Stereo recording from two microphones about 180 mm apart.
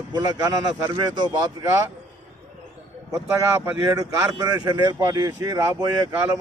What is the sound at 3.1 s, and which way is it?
Speech, 15° right (ahead or behind).